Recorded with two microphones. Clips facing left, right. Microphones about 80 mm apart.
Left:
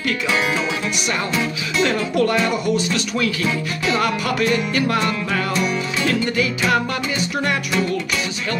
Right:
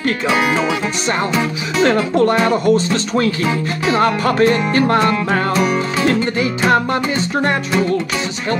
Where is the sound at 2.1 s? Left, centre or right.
Right.